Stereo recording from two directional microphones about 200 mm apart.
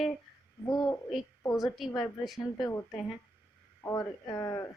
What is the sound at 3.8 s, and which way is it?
Speech, 15° left (ahead or behind).